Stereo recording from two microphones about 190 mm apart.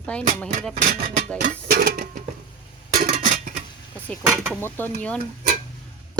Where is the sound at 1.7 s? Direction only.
50° right (ahead or behind).